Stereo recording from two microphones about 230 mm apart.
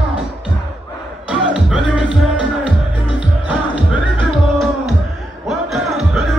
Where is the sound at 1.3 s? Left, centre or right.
Centre.